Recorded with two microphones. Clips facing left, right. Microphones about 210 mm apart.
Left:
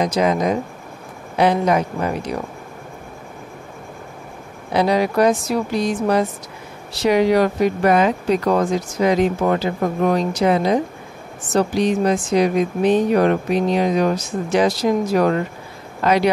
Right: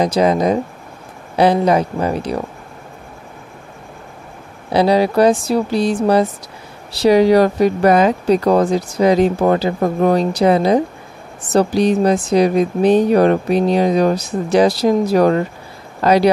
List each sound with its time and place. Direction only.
0.0 s speech: 35° right (ahead or behind)
4.7 s speech: 30° right (ahead or behind)